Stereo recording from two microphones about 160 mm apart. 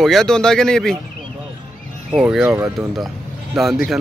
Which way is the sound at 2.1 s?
5° right (ahead or behind).